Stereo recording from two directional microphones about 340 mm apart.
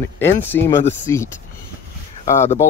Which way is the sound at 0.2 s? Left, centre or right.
Centre.